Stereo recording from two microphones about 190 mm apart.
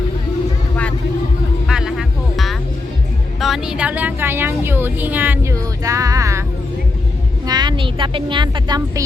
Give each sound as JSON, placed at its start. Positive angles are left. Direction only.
{"t": 1.6, "sound": "music", "side_deg": -5}
{"t": 3.4, "sound": "a woman's voice", "side_deg": 0}
{"t": 7.4, "sound": "a woman's voice", "side_deg": -20}